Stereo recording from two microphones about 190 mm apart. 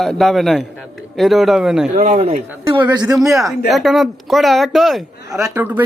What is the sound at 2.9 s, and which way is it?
Speech, 20° right (ahead or behind).